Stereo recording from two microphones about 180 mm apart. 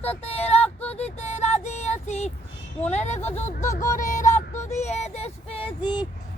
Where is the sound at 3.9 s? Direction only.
45° left (ahead or behind); by 6.1 s 25° left (ahead or behind).